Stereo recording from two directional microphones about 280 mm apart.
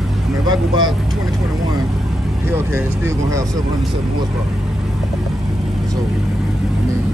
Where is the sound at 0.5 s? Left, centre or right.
Centre.